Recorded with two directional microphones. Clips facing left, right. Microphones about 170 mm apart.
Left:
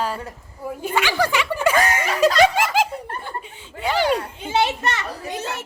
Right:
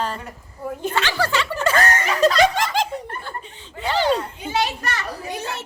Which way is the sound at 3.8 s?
10° left (ahead or behind).